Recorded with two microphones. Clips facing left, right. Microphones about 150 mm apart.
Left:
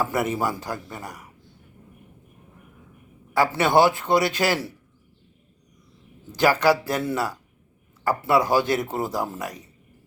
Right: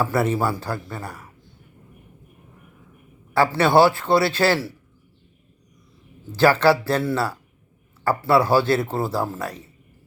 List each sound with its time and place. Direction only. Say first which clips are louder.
0.0 s speech: right 3 dB; 15° left (ahead or behind)
3.3 s speech: right 2 dB; 15° left (ahead or behind)
6.3 s speech: right 3 dB; 15° left (ahead or behind)